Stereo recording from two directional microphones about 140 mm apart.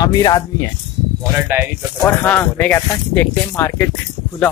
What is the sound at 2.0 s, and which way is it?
Speech, 10° left (ahead or behind).